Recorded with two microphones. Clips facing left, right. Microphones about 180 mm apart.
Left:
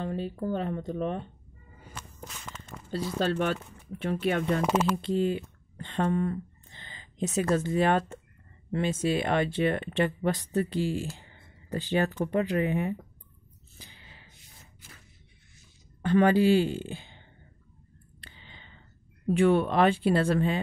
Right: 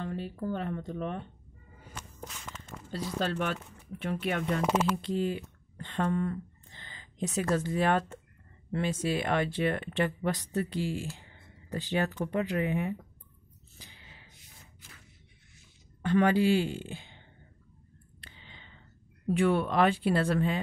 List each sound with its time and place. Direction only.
0.0 s speech: 20° left (ahead or behind)
2.9 s speech: 30° left (ahead or behind)
13.7 s a sound: 30° left (ahead or behind)
16.0 s speech: 35° left (ahead or behind)
18.2 s a sound: 35° left (ahead or behind)
19.2 s speech: 25° left (ahead or behind)